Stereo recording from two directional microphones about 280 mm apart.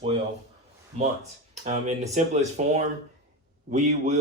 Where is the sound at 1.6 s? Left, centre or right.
Right.